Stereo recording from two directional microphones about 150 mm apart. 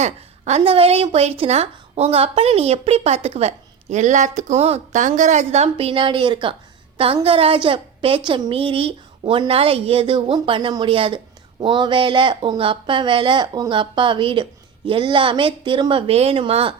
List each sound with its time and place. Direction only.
0.0 s a woman's voice: 50° right (ahead or behind)